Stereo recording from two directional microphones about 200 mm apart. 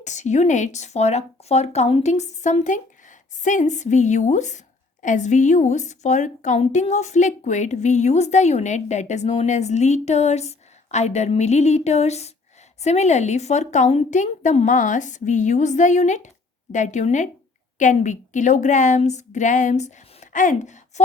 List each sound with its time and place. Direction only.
0.0 s a woman's voice: 35° left (ahead or behind)